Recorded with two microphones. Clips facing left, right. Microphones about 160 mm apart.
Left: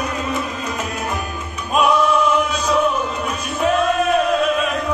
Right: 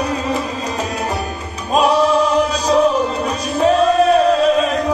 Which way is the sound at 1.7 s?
35° right (ahead or behind).